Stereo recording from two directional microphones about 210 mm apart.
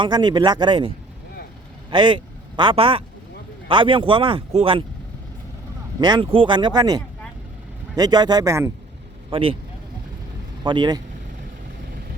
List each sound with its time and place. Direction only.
0.0 s speech: 20° right (ahead or behind)
6.0 s speech: 20° right (ahead or behind)
9.3 s speech: 25° right (ahead or behind)
10.6 s speech: 20° right (ahead or behind)